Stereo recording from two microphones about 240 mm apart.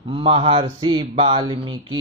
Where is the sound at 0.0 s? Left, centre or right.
Right.